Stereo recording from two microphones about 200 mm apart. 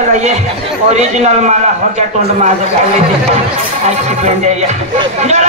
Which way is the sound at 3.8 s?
35° right (ahead or behind).